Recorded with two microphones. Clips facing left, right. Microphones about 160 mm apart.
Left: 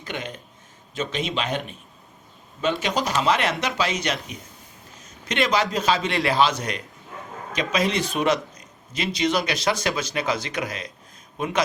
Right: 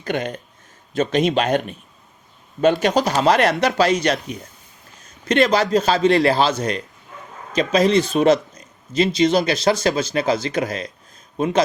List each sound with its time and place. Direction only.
0.0 s a man's voice: 50° right (ahead or behind)
5.5 s a man's voice: 35° right (ahead or behind)